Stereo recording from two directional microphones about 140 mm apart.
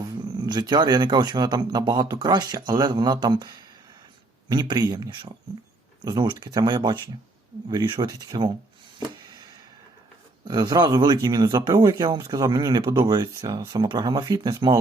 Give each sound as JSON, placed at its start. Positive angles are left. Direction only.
{"t": 0.0, "sound": "speech", "side_deg": -30}
{"t": 9.0, "sound": "a sound", "side_deg": -30}
{"t": 10.4, "sound": "speech", "side_deg": -30}